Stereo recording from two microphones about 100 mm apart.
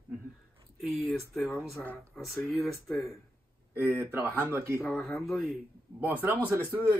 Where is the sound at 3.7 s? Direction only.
25° right (ahead or behind).